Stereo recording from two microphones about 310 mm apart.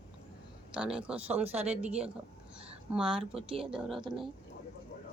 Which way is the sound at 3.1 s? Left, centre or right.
Centre.